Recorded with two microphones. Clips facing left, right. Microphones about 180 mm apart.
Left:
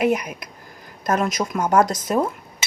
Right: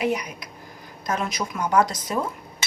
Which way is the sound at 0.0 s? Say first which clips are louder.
Left 5 dB; 55° left (ahead or behind).